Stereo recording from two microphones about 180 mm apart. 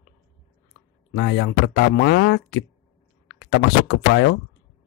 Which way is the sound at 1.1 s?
80° left.